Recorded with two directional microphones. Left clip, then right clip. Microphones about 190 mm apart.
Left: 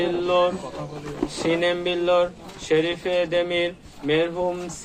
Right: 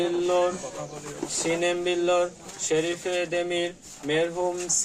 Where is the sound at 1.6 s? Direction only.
20° right (ahead or behind).